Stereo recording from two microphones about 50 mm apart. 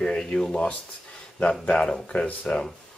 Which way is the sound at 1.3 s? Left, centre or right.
Left.